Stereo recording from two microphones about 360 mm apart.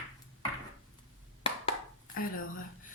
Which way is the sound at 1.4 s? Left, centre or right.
Centre.